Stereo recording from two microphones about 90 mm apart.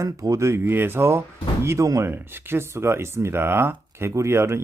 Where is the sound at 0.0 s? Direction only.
35° right (ahead or behind).